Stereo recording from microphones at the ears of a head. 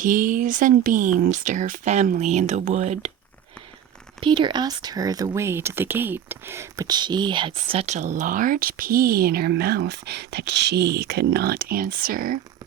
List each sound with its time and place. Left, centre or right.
0.0 s speech: right
4.2 s speech: right